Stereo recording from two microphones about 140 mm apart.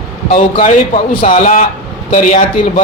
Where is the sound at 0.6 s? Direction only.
65° left (ahead or behind).